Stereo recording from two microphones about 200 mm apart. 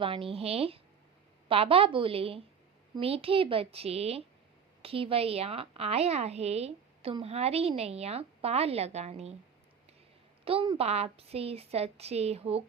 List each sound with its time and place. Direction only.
0.0 s a woman's voice: 25° right (ahead or behind)
10.4 s a woman's voice: 25° right (ahead or behind)